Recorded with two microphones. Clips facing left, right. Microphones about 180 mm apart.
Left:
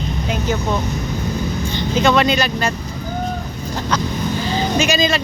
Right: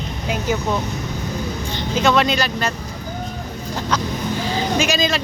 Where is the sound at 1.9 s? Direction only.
Centre (ahead or behind).